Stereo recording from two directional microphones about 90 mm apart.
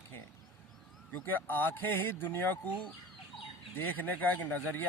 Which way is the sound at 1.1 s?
25° left (ahead or behind).